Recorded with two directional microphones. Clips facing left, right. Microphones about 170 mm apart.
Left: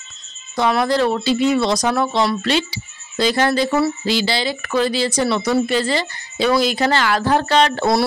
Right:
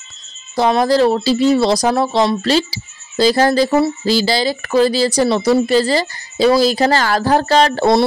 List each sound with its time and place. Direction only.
0.6 s speech: 30° right (ahead or behind)